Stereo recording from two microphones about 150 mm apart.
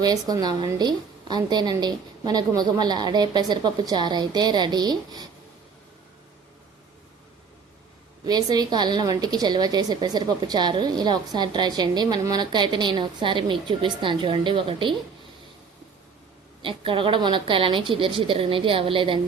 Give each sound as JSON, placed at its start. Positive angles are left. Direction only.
{"t": 0.0, "sound": "a woman's voice", "side_deg": -25}
{"t": 8.2, "sound": "a woman's voice", "side_deg": -25}
{"t": 16.6, "sound": "a woman's voice", "side_deg": -35}